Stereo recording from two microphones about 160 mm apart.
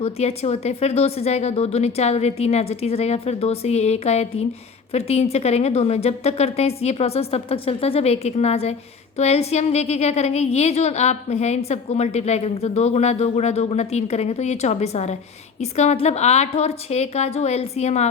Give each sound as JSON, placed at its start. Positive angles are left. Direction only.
{"t": 0.0, "sound": "a woman's voice", "side_deg": 40}